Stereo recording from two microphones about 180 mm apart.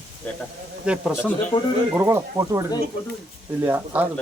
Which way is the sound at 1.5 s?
25° left (ahead or behind).